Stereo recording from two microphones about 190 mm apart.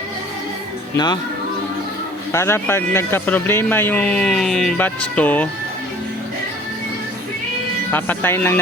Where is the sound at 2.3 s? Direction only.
15° left (ahead or behind).